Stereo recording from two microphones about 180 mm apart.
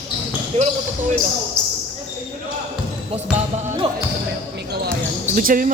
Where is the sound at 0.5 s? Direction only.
35° right (ahead or behind).